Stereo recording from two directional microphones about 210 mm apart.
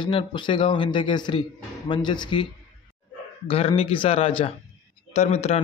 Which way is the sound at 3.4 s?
25° left (ahead or behind).